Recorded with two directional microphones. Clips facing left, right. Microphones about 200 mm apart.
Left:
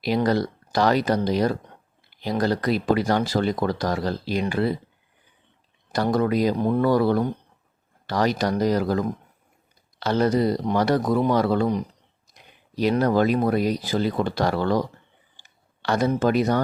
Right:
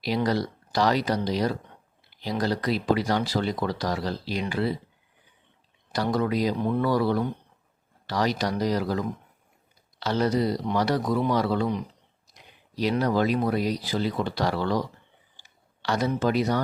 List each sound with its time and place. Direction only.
0.0 s speech: 50° left (ahead or behind)
5.9 s speech: 50° left (ahead or behind)
15.4 s a sound: 50° left (ahead or behind)